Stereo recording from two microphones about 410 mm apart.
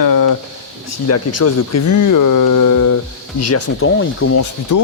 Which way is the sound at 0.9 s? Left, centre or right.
Left.